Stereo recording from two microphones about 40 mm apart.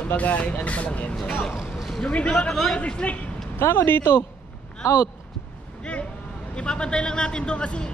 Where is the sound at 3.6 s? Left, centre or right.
Left.